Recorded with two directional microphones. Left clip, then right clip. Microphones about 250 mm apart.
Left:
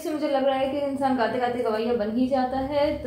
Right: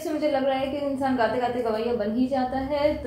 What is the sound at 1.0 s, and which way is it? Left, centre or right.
A woman's voice, centre.